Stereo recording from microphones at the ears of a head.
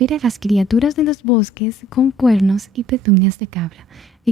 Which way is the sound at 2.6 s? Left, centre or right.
Right.